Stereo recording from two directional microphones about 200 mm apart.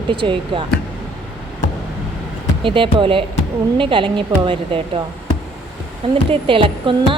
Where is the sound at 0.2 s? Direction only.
25° right (ahead or behind).